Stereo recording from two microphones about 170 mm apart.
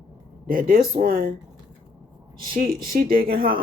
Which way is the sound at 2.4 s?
60° right (ahead or behind).